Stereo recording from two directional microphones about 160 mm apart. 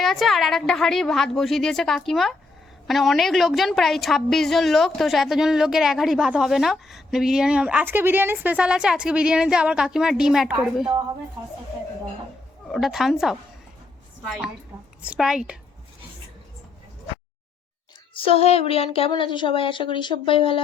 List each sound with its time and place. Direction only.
0.0 s a woman's voice: centre (ahead or behind)
12.6 s a woman's voice: centre (ahead or behind)
18.1 s a woman's voice: 35° left (ahead or behind)